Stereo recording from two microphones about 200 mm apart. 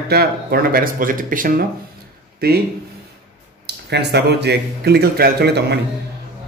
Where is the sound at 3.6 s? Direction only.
55° right (ahead or behind).